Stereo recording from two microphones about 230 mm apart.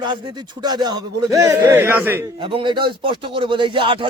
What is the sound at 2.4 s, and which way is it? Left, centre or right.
A man's voice, right.